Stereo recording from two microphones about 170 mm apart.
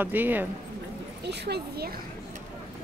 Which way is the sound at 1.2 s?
80° right.